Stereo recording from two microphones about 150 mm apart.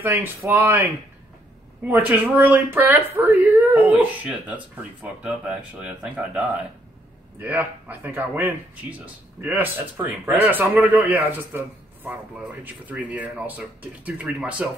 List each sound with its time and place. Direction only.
0.0 s speech: 15° right (ahead or behind)
1.9 s speech: 10° right (ahead or behind)